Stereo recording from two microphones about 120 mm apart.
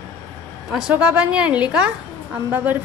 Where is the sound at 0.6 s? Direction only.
5° right (ahead or behind).